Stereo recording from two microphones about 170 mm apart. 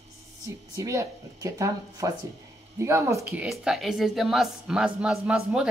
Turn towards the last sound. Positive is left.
turn(degrees=-5)  # may be behind; listen again after turning